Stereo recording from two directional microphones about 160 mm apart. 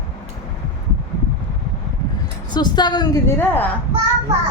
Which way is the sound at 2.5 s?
25° left (ahead or behind).